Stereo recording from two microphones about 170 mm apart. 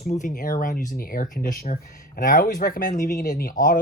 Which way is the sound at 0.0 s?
45° left (ahead or behind).